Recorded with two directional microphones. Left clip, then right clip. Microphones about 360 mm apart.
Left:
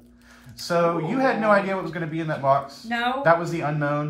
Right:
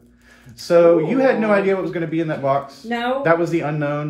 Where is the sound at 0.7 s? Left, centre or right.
Centre.